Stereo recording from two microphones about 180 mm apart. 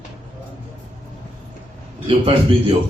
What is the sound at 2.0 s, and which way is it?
Speech, 30° right (ahead or behind).